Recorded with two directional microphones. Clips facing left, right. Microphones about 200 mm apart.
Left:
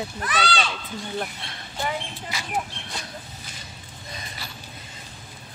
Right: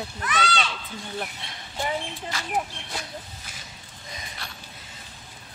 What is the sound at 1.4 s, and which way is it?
Speech, 15° right (ahead or behind).